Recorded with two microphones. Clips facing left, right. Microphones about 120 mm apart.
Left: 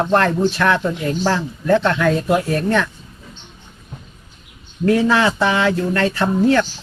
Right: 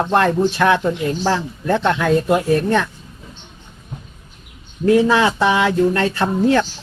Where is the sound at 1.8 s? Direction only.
15° right (ahead or behind).